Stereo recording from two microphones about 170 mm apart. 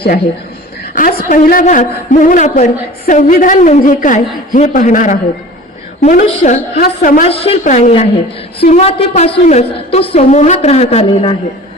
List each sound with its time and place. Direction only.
0.9 s a man's voice: 55° left (ahead or behind)
7.3 s a woman's voice: 35° left (ahead or behind)